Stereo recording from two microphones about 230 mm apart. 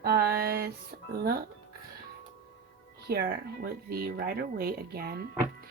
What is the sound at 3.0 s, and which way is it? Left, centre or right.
Speech, right.